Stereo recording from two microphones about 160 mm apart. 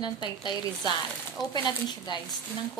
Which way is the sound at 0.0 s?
25° left (ahead or behind).